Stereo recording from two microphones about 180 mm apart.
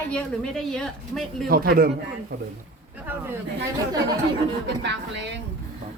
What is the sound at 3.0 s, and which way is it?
Speech, 10° right (ahead or behind).